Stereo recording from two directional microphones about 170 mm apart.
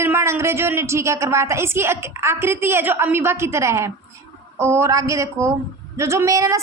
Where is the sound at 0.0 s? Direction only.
15° right (ahead or behind).